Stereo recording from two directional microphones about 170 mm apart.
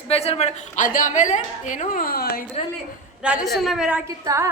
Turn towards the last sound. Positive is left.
turn(degrees=-15)  # may be behind; listen again after turning